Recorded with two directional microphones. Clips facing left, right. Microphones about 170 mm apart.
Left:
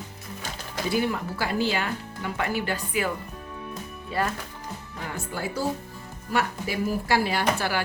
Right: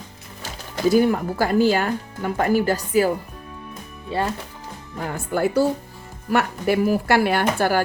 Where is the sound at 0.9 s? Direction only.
45° right (ahead or behind).